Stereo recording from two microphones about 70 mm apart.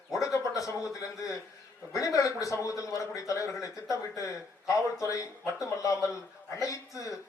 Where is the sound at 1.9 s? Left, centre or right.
Left.